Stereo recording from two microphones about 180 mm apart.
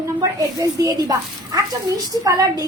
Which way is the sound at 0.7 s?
20° right (ahead or behind).